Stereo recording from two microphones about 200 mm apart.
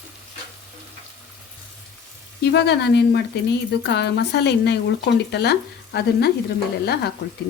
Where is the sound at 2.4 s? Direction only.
55° left (ahead or behind).